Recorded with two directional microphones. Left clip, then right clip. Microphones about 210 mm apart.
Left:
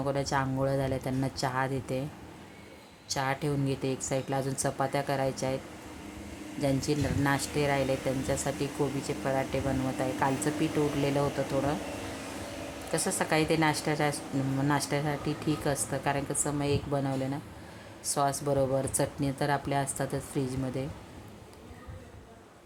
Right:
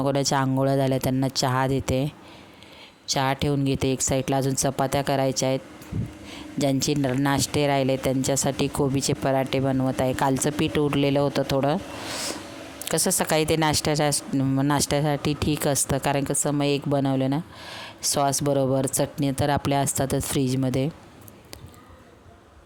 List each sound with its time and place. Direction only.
0.0 s speech: 45° right (ahead or behind)
3.1 s speech: 45° right (ahead or behind)
6.6 s speech: 45° right (ahead or behind)
12.9 s speech: 50° right (ahead or behind)